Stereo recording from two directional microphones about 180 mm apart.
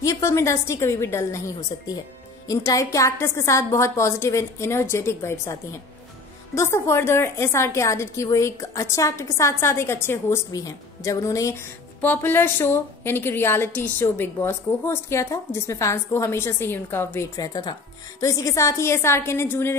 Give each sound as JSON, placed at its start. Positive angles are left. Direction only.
{"t": 0.0, "sound": "a woman's voice", "side_deg": 15}
{"t": 2.4, "sound": "a woman's voice", "side_deg": 20}